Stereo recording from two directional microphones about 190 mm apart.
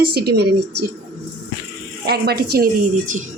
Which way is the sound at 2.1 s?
55° right (ahead or behind).